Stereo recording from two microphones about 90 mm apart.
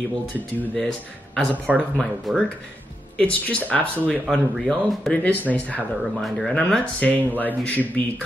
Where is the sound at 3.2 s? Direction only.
15° left (ahead or behind).